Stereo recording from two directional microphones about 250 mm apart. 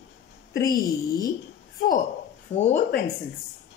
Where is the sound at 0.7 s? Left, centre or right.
Centre.